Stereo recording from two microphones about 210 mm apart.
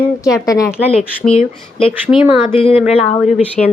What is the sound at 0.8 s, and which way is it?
Speech, 30° left (ahead or behind).